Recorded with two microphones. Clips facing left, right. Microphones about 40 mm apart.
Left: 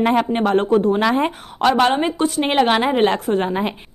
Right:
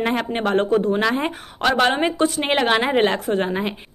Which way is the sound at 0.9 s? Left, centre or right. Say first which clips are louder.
Left 3 dB; centre.